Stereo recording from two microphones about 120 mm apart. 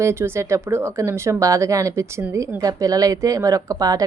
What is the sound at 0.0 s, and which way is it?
Speech, 20° right (ahead or behind).